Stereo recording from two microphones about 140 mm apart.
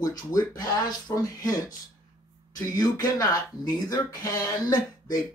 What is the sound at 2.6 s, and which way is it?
Speech, 25° left (ahead or behind).